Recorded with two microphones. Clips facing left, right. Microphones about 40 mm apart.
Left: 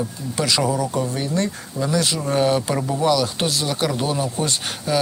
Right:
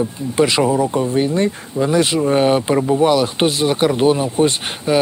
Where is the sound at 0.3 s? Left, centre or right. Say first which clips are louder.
Right 6 dB; right.